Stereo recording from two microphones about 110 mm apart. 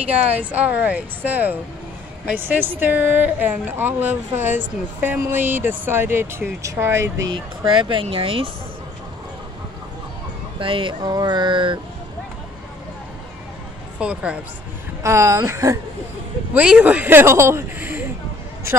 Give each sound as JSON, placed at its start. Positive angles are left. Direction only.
{"t": 0.0, "sound": "speech", "side_deg": -15}
{"t": 7.3, "sound": "speech", "side_deg": -50}
{"t": 10.6, "sound": "speech", "side_deg": -50}
{"t": 13.9, "sound": "speech", "side_deg": -10}
{"t": 15.0, "sound": "speech", "side_deg": -30}
{"t": 16.5, "sound": "speech", "side_deg": -10}